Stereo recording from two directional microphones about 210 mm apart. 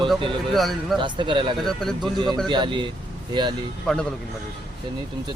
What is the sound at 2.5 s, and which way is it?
Speech, 20° right (ahead or behind).